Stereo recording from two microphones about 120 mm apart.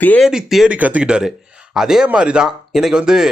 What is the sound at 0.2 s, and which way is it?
Speech, 5° right (ahead or behind).